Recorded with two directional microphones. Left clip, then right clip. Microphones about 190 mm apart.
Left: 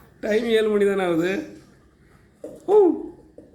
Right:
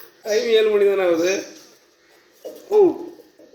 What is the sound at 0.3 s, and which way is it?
Speech, 30° left (ahead or behind).